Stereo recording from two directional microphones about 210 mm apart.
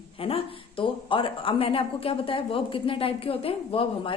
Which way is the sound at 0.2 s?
25° left (ahead or behind).